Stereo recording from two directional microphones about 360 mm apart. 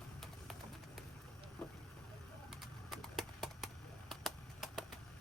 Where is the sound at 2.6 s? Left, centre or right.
Centre.